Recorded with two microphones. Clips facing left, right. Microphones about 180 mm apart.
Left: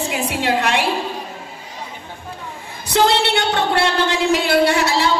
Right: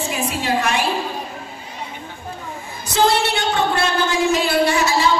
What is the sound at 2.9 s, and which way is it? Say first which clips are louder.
A woman's voice: left 1 dB; 65° left (ahead or behind).